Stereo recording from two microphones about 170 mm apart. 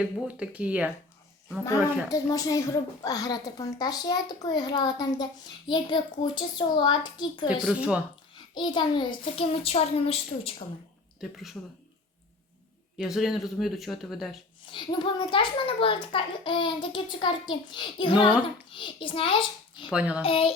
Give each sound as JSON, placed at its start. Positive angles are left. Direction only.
{"t": 0.0, "sound": "speech", "side_deg": -5}
{"t": 2.0, "sound": "a woman's voice", "side_deg": 20}
{"t": 7.4, "sound": "speech", "side_deg": -5}
{"t": 8.5, "sound": "a child's voice", "side_deg": 25}
{"t": 11.2, "sound": "speech", "side_deg": 0}
{"t": 13.0, "sound": "speech", "side_deg": 0}
{"t": 14.7, "sound": "a woman's voice", "side_deg": 30}
{"t": 19.9, "sound": "speech", "side_deg": -5}
{"t": 20.2, "sound": "a child's voice", "side_deg": 35}